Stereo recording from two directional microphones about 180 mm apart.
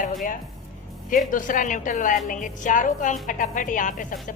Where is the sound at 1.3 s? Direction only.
45° left (ahead or behind).